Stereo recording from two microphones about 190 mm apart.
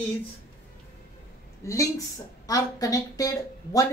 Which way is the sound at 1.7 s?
15° left (ahead or behind).